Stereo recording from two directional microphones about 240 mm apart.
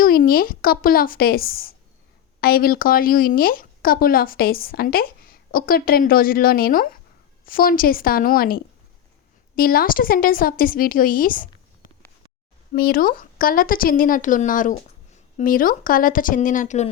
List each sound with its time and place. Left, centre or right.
0.0 s speech: left